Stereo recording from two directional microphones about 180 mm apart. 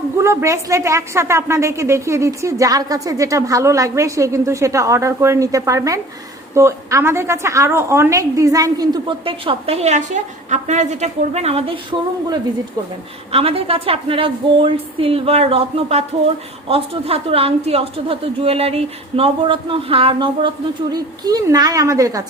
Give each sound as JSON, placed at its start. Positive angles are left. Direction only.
{"t": 0.2, "sound": "a woman's voice", "side_deg": -15}